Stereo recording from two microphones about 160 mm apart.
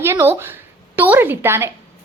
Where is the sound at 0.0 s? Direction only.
15° right (ahead or behind).